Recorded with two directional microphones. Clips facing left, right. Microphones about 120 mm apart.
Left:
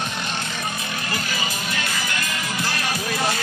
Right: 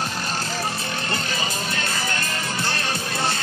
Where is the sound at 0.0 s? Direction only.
35° right (ahead or behind).